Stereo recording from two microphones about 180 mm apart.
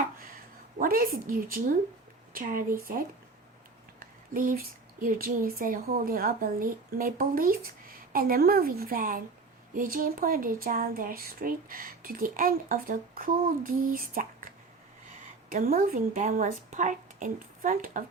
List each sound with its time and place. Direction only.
0.8 s speech: 55° right (ahead or behind)
4.0 s speech: 50° right (ahead or behind)